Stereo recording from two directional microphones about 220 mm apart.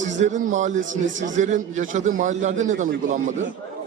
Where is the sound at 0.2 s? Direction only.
35° right (ahead or behind).